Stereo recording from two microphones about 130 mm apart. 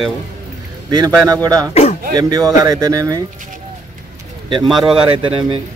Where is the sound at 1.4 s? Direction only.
30° right (ahead or behind).